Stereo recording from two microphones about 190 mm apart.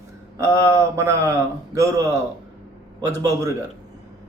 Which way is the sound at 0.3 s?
15° right (ahead or behind).